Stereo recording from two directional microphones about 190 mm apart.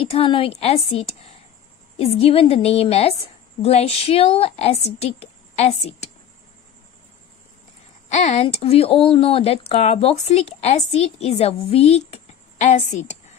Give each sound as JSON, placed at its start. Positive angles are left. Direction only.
{"t": 0.0, "sound": "speech", "side_deg": 30}
{"t": 8.1, "sound": "speech", "side_deg": 35}